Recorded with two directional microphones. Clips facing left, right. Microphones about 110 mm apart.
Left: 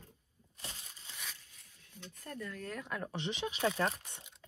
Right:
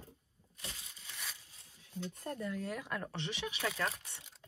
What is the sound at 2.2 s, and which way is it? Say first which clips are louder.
Speech: right 3 dB; 25° right (ahead or behind).